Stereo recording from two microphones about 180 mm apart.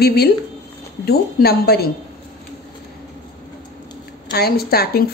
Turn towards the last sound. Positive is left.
turn(degrees=60)  # may be behind; listen again after turning